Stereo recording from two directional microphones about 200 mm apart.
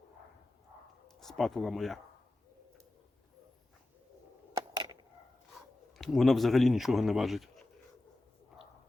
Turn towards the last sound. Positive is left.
turn(degrees=0)  # may be behind; listen again after turning